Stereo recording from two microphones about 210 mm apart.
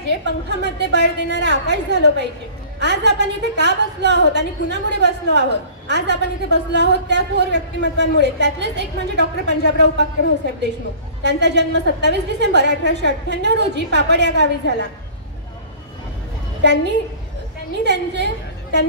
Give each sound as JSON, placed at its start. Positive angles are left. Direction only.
{"t": 0.5, "sound": "a woman's voice", "side_deg": -55}
{"t": 16.6, "sound": "a woman's voice", "side_deg": -55}
{"t": 17.8, "sound": "a woman's voice", "side_deg": -55}